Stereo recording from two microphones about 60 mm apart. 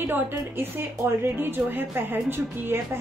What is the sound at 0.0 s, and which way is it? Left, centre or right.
Speech, right.